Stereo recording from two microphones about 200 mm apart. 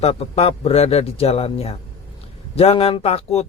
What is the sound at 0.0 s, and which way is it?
Speech, 30° left (ahead or behind).